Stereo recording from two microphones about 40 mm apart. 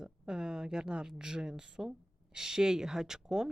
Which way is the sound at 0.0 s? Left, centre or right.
Centre.